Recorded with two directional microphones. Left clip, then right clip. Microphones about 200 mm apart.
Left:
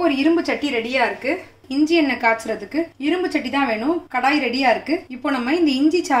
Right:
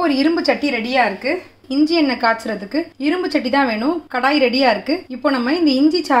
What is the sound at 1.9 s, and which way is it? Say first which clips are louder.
A woman's voice: even; 25° right (ahead or behind).